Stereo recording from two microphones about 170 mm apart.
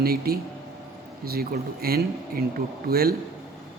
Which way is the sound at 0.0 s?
60° right (ahead or behind).